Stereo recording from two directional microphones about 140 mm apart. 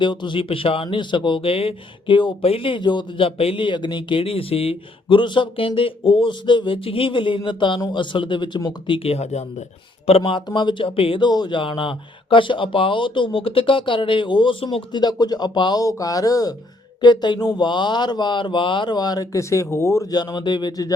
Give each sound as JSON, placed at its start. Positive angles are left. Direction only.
{"t": 0.0, "sound": "speech", "side_deg": 35}
{"t": 9.0, "sound": "speech", "side_deg": 50}
{"t": 10.1, "sound": "speech", "side_deg": 40}